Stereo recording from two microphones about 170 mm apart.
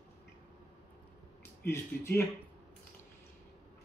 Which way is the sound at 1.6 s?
15° left (ahead or behind).